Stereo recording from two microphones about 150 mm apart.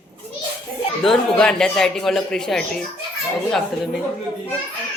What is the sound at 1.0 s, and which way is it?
Speech, 5° left (ahead or behind).